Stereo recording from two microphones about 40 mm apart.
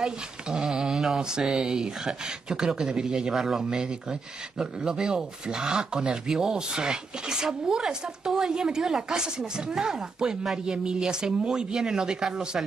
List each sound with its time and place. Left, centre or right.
0.0 s speech: centre